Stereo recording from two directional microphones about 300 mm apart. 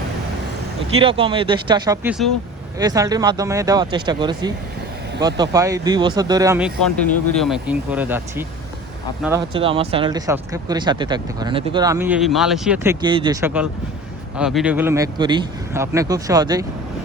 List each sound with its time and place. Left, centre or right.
0.9 s speech: centre